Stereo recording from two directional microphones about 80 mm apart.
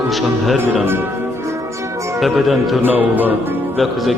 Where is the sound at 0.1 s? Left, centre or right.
Centre.